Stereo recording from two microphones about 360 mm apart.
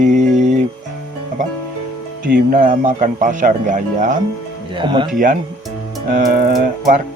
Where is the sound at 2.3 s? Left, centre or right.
Right.